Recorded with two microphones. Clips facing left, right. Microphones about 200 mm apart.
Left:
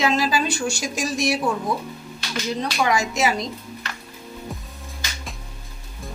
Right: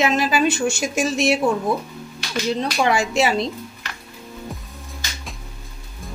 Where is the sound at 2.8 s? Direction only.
30° right (ahead or behind).